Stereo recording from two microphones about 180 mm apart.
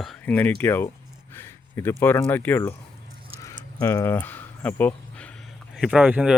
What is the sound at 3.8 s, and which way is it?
Speech, 15° left (ahead or behind).